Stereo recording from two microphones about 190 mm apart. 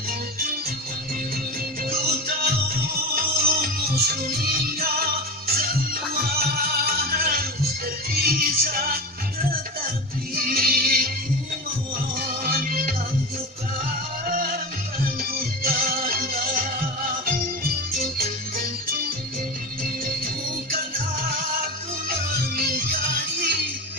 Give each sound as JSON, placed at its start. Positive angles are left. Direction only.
{"t": 1.9, "sound": "music", "side_deg": -50}
{"t": 10.3, "sound": "music", "side_deg": -50}
{"t": 12.4, "sound": "music", "side_deg": -50}
{"t": 14.3, "sound": "music", "side_deg": -50}
{"t": 20.7, "sound": "music", "side_deg": -50}